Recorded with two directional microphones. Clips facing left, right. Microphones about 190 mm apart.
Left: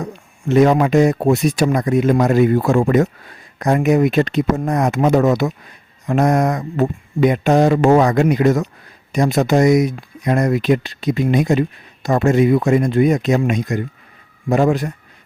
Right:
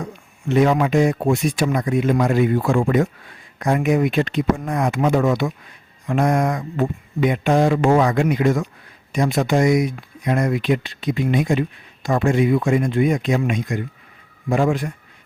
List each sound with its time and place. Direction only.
0.0 s speech: 40° left (ahead or behind)